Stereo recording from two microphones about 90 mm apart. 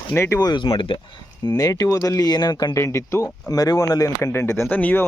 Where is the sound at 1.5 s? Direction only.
45° left (ahead or behind).